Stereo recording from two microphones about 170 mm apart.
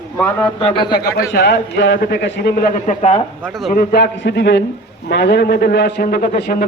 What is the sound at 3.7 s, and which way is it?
A man's voice, 60° left (ahead or behind).